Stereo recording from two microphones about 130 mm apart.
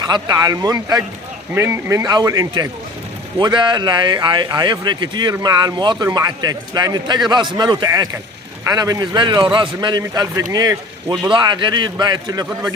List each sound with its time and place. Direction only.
0.1 s a man's voice: 30° right (ahead or behind)
1.5 s a man's voice: 20° right (ahead or behind)